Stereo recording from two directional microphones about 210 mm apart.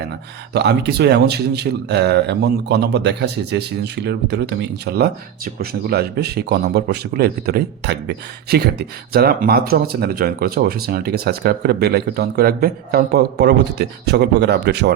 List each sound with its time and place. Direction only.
0.5 s speech: 55° right (ahead or behind)